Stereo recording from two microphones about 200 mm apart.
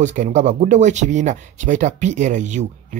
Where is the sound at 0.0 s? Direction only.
40° right (ahead or behind).